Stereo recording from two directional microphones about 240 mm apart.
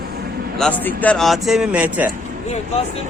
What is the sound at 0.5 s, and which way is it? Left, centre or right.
Speech, centre.